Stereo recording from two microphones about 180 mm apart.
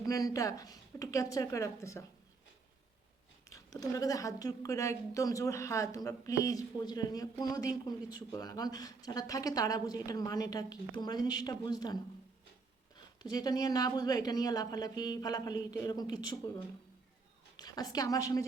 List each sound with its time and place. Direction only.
0.0 s a woman's voice: 20° left (ahead or behind)
3.5 s a woman's voice: 20° left (ahead or behind)
13.3 s a woman's voice: 20° left (ahead or behind)